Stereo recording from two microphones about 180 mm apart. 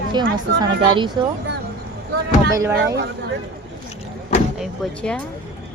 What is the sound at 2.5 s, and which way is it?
Speech, 15° right (ahead or behind).